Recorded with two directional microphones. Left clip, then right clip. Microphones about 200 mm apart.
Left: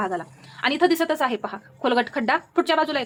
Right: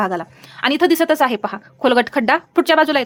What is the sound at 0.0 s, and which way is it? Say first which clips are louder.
A woman's voice: right 6 dB; 40° right (ahead or behind).